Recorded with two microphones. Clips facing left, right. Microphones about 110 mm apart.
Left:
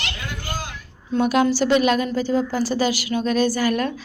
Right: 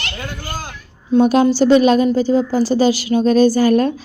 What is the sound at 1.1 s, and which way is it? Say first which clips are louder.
A woman's voice: right 6 dB; 25° right (ahead or behind).